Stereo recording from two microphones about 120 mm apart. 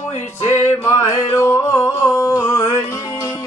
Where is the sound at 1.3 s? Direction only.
25° left (ahead or behind).